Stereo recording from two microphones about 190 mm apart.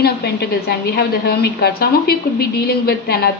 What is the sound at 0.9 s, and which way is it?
A woman's voice, 55° left (ahead or behind).